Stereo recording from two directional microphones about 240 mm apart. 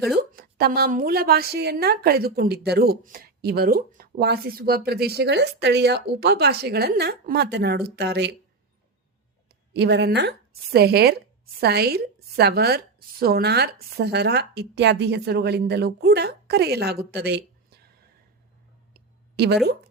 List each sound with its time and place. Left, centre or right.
0.2 s a woman's voice: right
9.7 s a woman's voice: right
19.4 s a woman's voice: right